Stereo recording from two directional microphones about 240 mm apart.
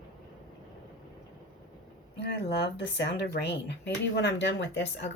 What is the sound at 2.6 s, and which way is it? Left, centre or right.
A woman's voice, left.